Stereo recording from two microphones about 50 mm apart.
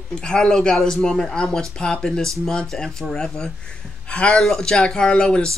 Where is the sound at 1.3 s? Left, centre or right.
Centre.